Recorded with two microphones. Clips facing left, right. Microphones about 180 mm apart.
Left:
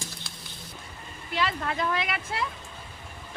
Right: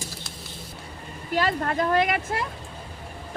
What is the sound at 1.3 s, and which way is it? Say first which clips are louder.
Speech: right 5 dB; 45° right (ahead or behind).